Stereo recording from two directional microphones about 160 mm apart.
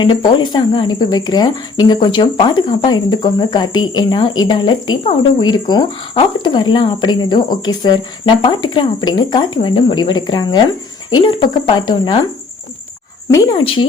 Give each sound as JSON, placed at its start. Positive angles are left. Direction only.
{"t": 0.0, "sound": "speech", "side_deg": 30}
{"t": 13.3, "sound": "speech", "side_deg": 25}